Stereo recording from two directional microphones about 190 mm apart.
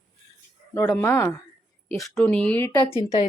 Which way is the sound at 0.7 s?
15° left (ahead or behind).